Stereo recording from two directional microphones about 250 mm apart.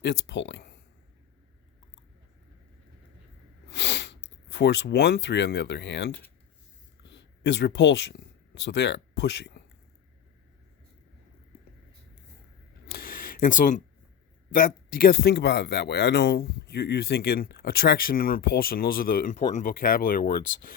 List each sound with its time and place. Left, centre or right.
0.0 s speech: left
3.7 s speech: left
7.0 s a sound: left
8.5 s speech: left
12.9 s a sound: left
14.5 s speech: left